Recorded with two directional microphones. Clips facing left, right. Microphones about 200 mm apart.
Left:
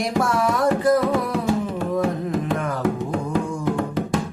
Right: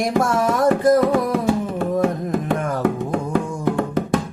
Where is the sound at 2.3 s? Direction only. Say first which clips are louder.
Right 2 dB; 55° right (ahead or behind).